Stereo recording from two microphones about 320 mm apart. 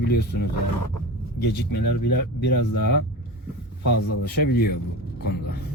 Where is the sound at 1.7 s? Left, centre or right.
Left.